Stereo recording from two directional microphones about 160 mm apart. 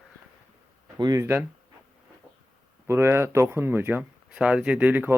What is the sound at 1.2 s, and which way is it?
Speech, 10° right (ahead or behind).